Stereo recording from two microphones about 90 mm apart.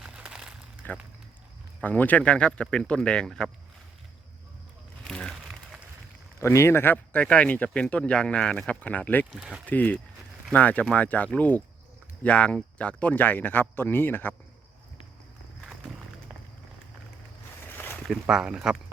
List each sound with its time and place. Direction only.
0.0 s crumpling: 10° right (ahead or behind)
1.8 s speech: 20° left (ahead or behind)
5.0 s crumpling: 5° left (ahead or behind)
6.4 s speech: 30° left (ahead or behind)
9.3 s speech: 10° right (ahead or behind)
9.6 s speech: 15° left (ahead or behind)
17.7 s a sound: 20° left (ahead or behind)
18.1 s speech: 5° right (ahead or behind)